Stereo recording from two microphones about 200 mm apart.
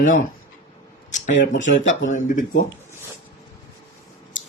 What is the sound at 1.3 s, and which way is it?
Speech, 40° left (ahead or behind).